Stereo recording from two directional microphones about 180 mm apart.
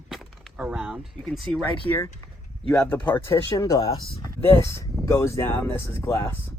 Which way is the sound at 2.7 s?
10° left (ahead or behind).